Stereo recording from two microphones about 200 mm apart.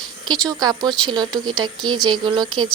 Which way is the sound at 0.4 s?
20° right (ahead or behind).